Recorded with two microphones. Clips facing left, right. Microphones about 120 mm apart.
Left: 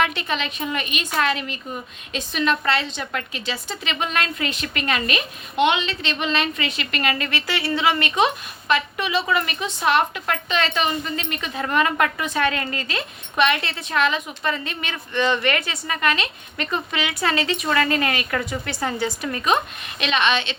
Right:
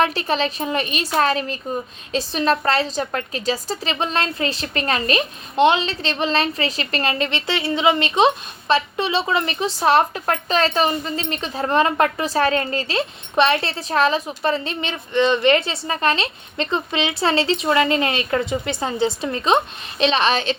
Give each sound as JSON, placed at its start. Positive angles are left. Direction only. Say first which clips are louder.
{"t": 0.0, "sound": "speech", "louder": "right 4 dB", "side_deg": -35}